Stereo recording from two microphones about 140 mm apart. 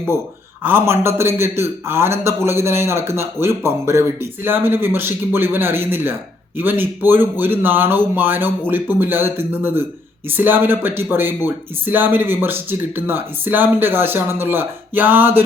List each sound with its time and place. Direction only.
0.6 s a man's voice: 15° right (ahead or behind)